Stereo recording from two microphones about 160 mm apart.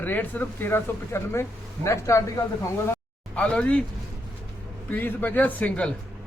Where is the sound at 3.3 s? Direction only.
5° left (ahead or behind).